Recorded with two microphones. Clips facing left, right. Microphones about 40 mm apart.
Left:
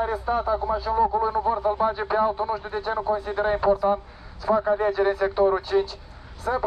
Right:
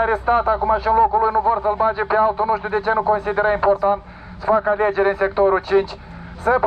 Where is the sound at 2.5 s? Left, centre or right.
Right.